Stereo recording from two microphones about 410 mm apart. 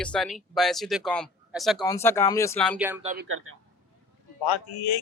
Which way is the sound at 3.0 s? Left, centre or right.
Centre.